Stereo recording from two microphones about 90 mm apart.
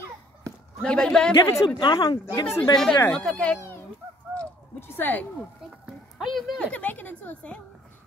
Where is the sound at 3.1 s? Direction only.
10° left (ahead or behind).